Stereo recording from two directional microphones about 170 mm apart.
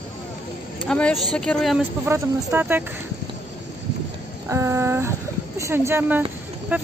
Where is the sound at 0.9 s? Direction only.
5° left (ahead or behind).